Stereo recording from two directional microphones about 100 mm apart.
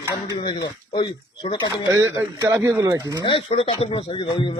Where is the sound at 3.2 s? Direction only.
60° left (ahead or behind).